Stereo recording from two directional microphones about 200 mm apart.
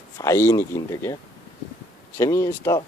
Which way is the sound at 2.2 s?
15° left (ahead or behind).